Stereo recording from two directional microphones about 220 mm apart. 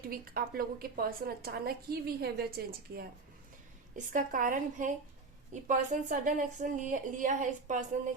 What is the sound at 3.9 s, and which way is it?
A woman's voice, 35° right (ahead or behind).